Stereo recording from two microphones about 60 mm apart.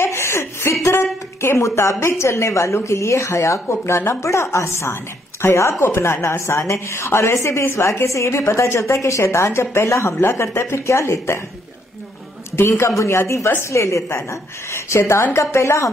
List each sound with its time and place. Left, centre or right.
0.0 s chuckle: left
1.4 s a woman's voice: left
12.5 s a woman's voice: left